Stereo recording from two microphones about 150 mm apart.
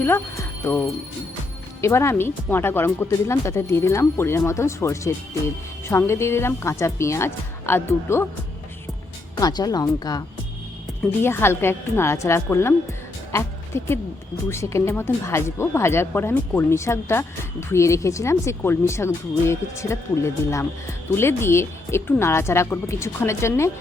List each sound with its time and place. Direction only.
0.0 s speech: 15° left (ahead or behind)
9.3 s speech: 25° left (ahead or behind)
11.2 s speech: 15° left (ahead or behind)